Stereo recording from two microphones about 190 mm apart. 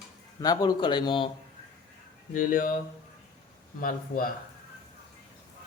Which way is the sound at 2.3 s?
45° left (ahead or behind).